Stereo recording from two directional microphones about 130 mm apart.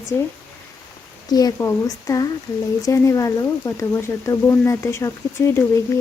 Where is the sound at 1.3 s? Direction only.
30° left (ahead or behind).